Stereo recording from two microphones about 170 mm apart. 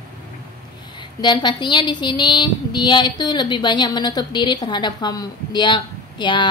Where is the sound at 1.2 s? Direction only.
25° left (ahead or behind).